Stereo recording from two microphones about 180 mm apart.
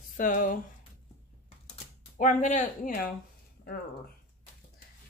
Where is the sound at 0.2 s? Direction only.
50° left (ahead or behind).